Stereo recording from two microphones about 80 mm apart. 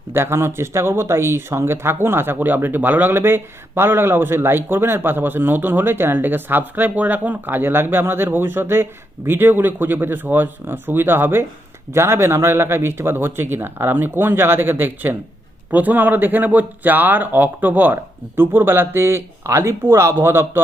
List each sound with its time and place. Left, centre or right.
0.1 s speech: right